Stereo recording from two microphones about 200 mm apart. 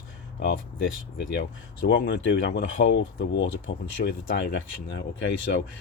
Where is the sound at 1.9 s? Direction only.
60° left (ahead or behind).